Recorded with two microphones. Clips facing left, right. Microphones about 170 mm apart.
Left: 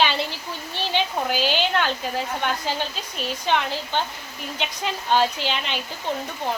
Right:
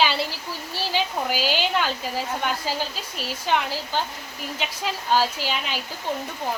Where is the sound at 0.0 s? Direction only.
5° right (ahead or behind).